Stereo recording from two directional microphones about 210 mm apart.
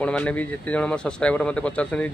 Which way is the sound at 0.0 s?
5° left (ahead or behind).